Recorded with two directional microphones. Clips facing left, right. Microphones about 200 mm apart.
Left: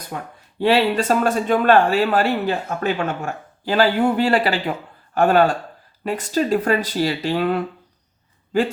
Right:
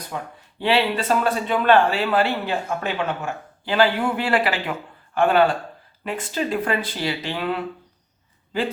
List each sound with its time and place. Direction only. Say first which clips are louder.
0.6 s speech: left 4 dB; 40° left (ahead or behind)